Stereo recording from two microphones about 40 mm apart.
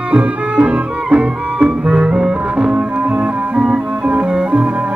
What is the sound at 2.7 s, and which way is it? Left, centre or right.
Music, right.